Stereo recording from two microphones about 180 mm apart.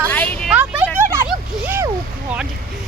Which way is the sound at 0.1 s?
10° left (ahead or behind).